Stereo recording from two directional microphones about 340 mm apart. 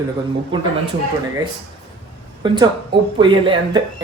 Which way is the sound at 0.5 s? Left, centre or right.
Centre.